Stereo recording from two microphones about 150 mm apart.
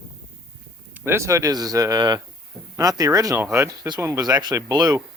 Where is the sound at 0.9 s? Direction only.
15° right (ahead or behind).